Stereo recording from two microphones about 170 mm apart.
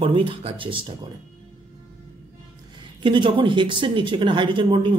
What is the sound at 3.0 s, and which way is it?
Speech, 30° right (ahead or behind).